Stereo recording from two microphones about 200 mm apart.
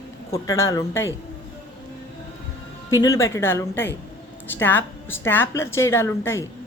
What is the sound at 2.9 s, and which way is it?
A woman's voice, 15° left (ahead or behind).